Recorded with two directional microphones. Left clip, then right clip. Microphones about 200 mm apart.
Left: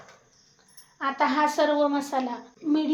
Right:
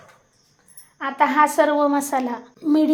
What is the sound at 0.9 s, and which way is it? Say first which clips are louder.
A woman's voice: right 6 dB; 25° right (ahead or behind).